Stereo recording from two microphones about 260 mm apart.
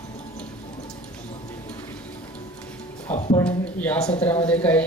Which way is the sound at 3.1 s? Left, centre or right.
Left.